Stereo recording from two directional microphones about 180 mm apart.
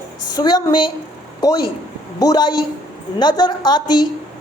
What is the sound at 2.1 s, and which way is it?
A woman's voice, 20° left (ahead or behind).